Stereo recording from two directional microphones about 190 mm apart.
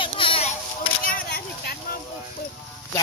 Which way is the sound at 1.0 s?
50° left (ahead or behind).